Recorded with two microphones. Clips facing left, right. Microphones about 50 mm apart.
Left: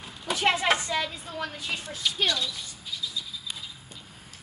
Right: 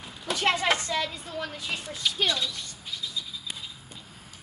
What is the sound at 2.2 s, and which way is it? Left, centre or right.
Speech, right.